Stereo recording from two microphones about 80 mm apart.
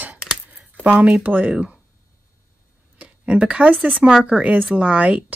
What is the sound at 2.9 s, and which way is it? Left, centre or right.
A woman's voice, centre.